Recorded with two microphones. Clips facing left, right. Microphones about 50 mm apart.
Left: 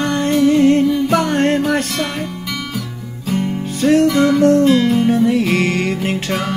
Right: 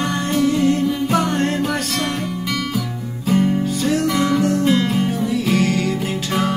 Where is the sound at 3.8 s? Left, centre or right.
Left.